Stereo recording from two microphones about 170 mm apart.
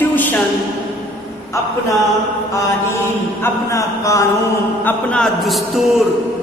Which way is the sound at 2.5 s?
15° left (ahead or behind).